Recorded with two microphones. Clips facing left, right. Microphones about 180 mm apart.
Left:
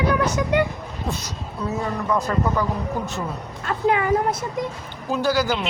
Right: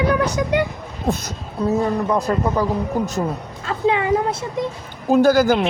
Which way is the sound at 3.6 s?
30° right (ahead or behind).